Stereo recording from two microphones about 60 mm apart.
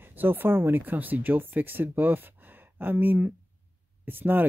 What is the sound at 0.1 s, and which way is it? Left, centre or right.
Speech, right.